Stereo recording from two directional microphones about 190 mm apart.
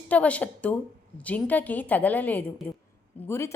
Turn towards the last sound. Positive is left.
turn(degrees=15)  # may be behind; listen again after turning